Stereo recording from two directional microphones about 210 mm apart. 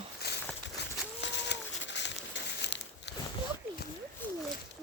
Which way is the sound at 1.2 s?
55° left (ahead or behind).